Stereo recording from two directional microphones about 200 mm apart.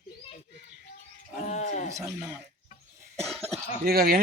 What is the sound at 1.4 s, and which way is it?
Speech, 35° left (ahead or behind).